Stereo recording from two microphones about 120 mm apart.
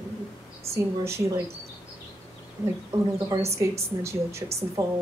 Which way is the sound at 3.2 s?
25° right (ahead or behind).